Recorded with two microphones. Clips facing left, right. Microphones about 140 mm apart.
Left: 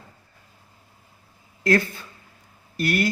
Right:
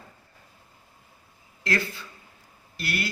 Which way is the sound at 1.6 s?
50° left (ahead or behind).